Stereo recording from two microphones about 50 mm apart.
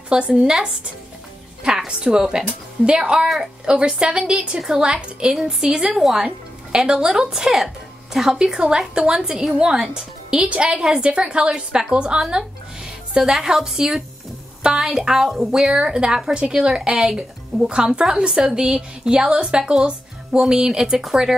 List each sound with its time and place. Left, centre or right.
0.3 s speech: centre
1.9 s a woman's voice: centre
15.7 s a woman's voice: centre
17.6 s a woman's voice: centre